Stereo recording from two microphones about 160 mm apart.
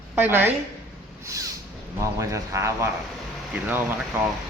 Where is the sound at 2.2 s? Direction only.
20° right (ahead or behind).